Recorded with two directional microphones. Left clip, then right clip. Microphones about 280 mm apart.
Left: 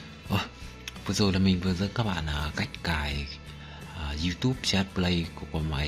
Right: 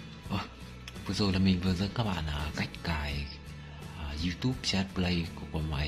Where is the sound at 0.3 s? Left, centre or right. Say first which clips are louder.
Left 6 dB; centre.